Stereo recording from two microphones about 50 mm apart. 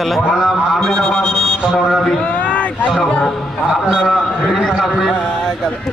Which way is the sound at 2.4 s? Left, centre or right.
Left.